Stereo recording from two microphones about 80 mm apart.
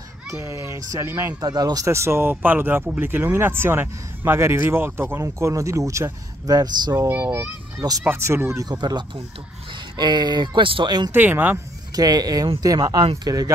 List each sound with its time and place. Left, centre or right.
0.3 s speech: right
1.4 s speech: right
1.9 s speech: right
6.4 s speech: right
7.1 s speech: right
8.6 s speech: right
11.1 s speech: right
11.9 s speech: right